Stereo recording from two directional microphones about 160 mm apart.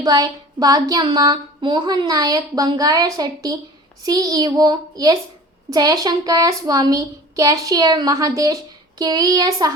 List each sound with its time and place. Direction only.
0.0 s a woman's voice: 25° right (ahead or behind)